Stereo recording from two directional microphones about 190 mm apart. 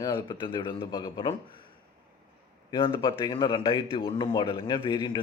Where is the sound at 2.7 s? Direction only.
25° left (ahead or behind).